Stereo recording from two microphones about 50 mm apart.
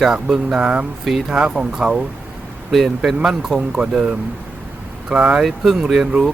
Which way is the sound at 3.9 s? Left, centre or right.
Centre.